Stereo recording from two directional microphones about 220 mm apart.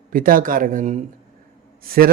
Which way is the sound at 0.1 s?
40° right (ahead or behind).